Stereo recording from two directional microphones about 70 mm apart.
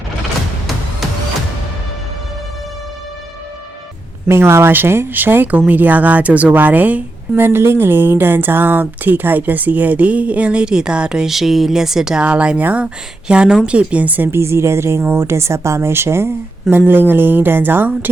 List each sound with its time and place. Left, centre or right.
4.3 s speech: right
14.3 s a woman's voice: right